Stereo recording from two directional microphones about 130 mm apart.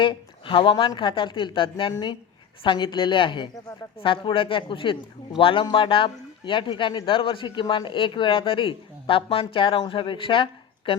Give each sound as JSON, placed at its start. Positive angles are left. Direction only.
{"t": 0.0, "sound": "a man's voice", "side_deg": 40}